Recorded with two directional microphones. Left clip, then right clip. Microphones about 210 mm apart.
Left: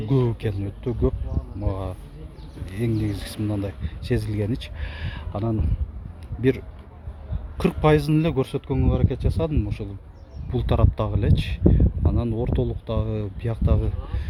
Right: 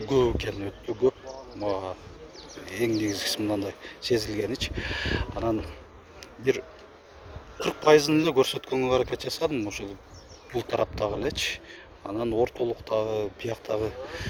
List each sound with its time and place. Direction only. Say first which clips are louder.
0.1 s speech: right 2 dB; 5° right (ahead or behind)
7.6 s speech: right 1 dB; 10° right (ahead or behind)